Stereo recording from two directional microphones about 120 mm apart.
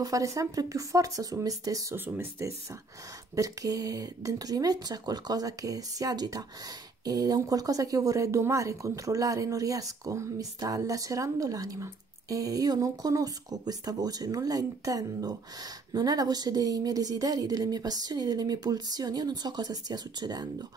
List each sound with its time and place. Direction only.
0.0 s speech: 30° right (ahead or behind)